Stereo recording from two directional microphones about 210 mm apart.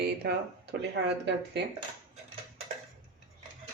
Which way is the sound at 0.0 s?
50° right (ahead or behind).